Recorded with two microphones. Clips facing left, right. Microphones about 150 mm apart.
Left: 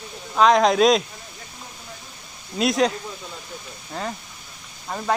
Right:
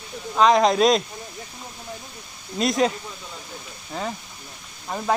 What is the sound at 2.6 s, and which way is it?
Speech, centre (ahead or behind).